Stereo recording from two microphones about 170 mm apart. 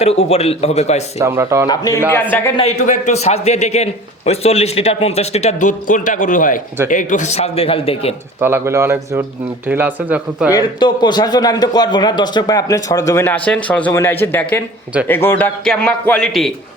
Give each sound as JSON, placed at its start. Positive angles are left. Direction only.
{"t": 0.0, "sound": "speech", "side_deg": 35}
{"t": 1.2, "sound": "speech", "side_deg": -15}
{"t": 1.6, "sound": "a man's voice", "side_deg": 20}
{"t": 2.6, "sound": "speech", "side_deg": 40}
{"t": 8.4, "sound": "speech", "side_deg": -10}
{"t": 10.5, "sound": "a man's voice", "side_deg": 25}